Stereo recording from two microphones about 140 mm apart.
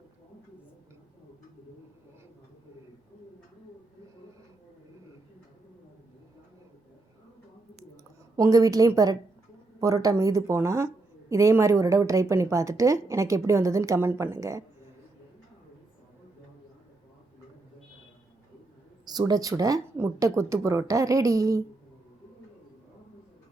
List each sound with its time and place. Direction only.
8.4 s speech: 25° right (ahead or behind)
19.0 s speech: 30° right (ahead or behind)